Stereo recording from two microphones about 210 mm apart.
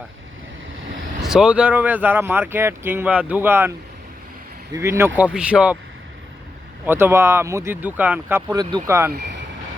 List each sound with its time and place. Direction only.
1.2 s speech: centre (ahead or behind)
6.8 s speech: 10° right (ahead or behind)